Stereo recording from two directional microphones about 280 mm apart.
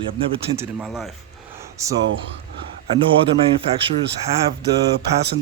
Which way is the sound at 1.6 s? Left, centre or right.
Centre.